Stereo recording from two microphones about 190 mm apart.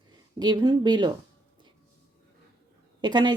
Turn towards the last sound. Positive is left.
turn(degrees=-25)  # may be behind; listen again after turning